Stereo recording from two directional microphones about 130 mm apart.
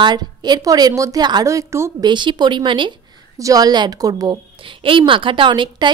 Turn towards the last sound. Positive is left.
turn(degrees=-35)  # may be behind; listen again after turning